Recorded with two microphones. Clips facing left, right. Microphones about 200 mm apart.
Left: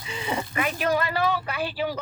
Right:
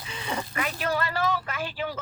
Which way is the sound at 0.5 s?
15° left (ahead or behind).